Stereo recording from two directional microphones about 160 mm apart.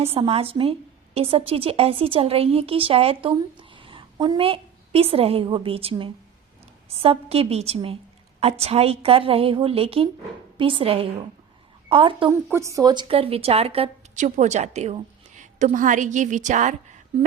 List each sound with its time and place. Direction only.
0.0 s a woman's voice: 40° right (ahead or behind)
12.5 s a woman's voice: 20° right (ahead or behind); by 13.9 s 35° right (ahead or behind)
14.2 s a woman's voice: 45° right (ahead or behind)
17.1 s a sound: 40° right (ahead or behind)